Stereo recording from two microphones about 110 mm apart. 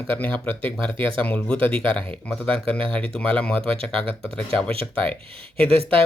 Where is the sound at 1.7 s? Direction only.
55° right (ahead or behind).